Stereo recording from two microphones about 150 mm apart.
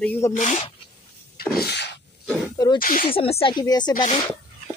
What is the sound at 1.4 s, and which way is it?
Sneeze, 90° left.